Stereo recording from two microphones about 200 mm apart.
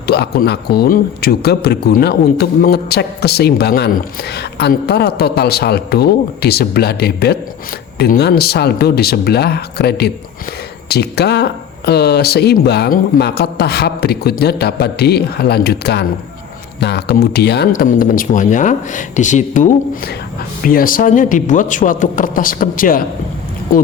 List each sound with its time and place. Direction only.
0.1 s speech: 55° left (ahead or behind)